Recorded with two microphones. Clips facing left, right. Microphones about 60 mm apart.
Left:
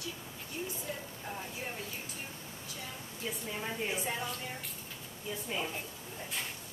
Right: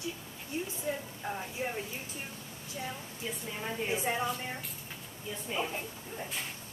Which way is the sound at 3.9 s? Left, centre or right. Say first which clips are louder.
Right 4 dB; right.